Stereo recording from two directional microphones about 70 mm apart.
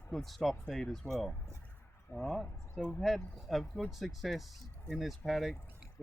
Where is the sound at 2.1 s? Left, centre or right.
Left.